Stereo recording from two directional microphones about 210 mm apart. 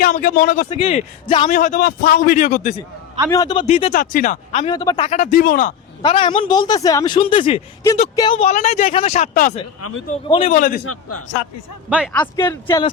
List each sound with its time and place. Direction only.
0.0 s speech: 40° left (ahead or behind)
1.5 s speech: 40° left (ahead or behind)
3.2 s speech: 15° left (ahead or behind); by 5.7 s 40° left (ahead or behind)
6.0 s speech: 25° left (ahead or behind)
8.4 s speech: 30° left (ahead or behind)
10.2 s speech: 25° left (ahead or behind)
10.5 s speech: 40° left (ahead or behind)
11.9 s speech: 5° right (ahead or behind)
12.5 s speech: 10° left (ahead or behind)